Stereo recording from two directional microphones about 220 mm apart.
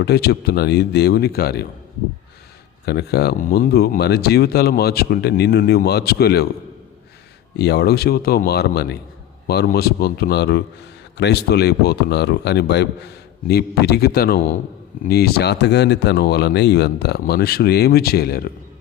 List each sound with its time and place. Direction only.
0.0 s speech: 50° left (ahead or behind)
2.8 s speech: 50° left (ahead or behind)
7.5 s speech: 50° left (ahead or behind)